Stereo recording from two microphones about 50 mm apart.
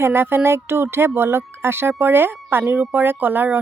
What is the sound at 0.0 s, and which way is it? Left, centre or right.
Speech, right.